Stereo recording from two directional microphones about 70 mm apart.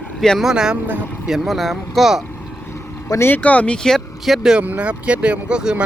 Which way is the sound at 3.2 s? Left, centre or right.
Left.